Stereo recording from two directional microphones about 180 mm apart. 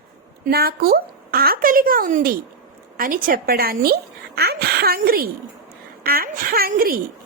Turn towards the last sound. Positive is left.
turn(degrees=-55)  # may be behind; listen again after turning